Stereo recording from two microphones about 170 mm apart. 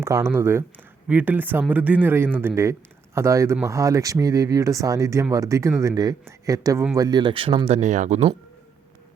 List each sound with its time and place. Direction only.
0.0 s a man's voice: 15° right (ahead or behind); by 8.4 s 40° right (ahead or behind)